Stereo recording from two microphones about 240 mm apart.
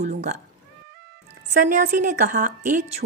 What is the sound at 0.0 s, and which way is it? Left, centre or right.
Speech, right.